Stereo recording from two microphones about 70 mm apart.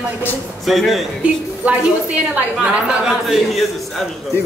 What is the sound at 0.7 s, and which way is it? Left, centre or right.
Speech, centre.